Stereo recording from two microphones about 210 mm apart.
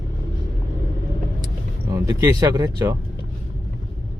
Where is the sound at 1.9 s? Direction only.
15° right (ahead or behind).